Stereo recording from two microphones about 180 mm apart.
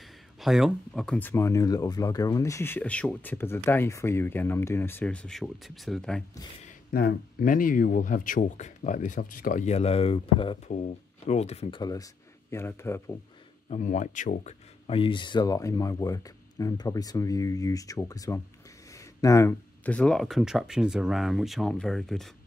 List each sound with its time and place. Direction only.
0.4 s speech: centre (ahead or behind)
6.9 s speech: 55° left (ahead or behind); by 13.1 s 15° left (ahead or behind)
13.7 s speech: 40° left (ahead or behind)
14.9 s speech: 30° left (ahead or behind); by 22.3 s centre (ahead or behind)